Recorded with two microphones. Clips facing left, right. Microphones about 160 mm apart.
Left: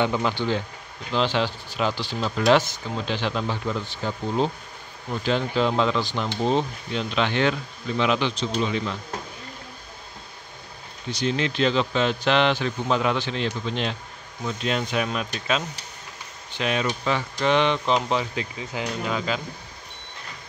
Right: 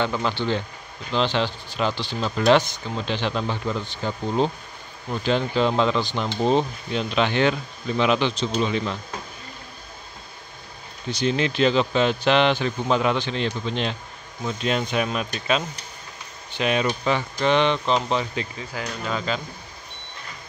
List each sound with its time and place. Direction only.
0.0 s speech: 15° left (ahead or behind)
6.4 s speech: 15° right (ahead or behind)
8.0 s a man's voice: 20° right (ahead or behind)
11.3 s speech: 10° right (ahead or behind)
17.5 s speech: 5° left (ahead or behind)
18.6 s speech: 15° left (ahead or behind)